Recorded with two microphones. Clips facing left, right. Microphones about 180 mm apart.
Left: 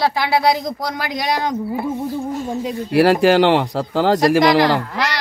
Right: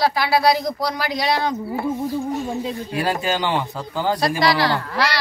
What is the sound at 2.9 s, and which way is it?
Speech, 75° left (ahead or behind).